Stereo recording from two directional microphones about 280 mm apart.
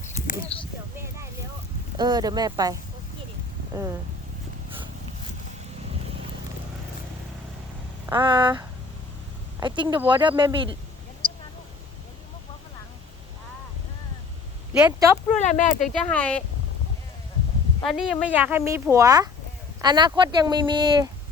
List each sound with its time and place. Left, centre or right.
0.0 s a sound: left
2.0 s speech: centre
3.7 s speech: centre
8.0 s speech: centre
11.2 s a sound: right
14.7 s speech: centre
15.4 s speech: left
15.9 s speech: centre
17.8 s speech: centre